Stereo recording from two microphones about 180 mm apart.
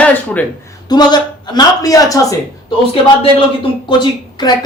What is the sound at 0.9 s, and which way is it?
A man's voice, 25° left (ahead or behind).